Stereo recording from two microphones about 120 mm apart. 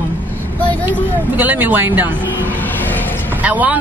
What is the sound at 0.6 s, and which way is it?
Vehicle, 15° left (ahead or behind).